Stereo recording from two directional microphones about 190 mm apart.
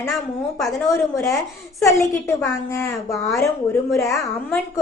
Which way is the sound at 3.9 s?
15° left (ahead or behind).